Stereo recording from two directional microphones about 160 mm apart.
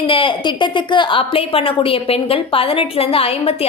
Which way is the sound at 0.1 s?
30° left (ahead or behind).